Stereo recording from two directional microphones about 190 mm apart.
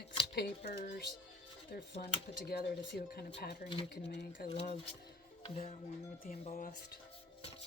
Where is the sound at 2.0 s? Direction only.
50° left (ahead or behind).